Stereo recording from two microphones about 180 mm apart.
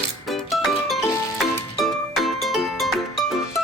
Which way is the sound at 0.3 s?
Centre (ahead or behind).